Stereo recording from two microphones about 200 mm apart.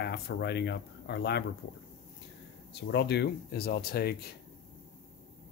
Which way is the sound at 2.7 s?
55° left (ahead or behind).